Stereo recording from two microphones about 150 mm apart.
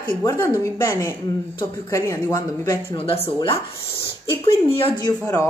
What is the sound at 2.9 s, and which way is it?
Speech, 40° left (ahead or behind).